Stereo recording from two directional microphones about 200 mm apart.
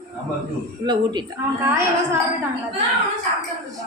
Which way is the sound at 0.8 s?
20° right (ahead or behind).